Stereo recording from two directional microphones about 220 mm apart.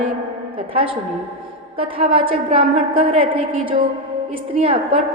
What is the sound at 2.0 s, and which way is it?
A woman's voice, 25° right (ahead or behind).